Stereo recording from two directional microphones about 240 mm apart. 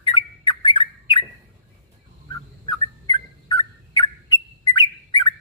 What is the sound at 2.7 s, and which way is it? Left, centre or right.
Bird, centre.